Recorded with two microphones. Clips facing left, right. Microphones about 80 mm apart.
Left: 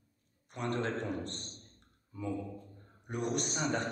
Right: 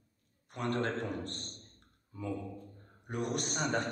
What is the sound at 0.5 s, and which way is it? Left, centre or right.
Speech, right.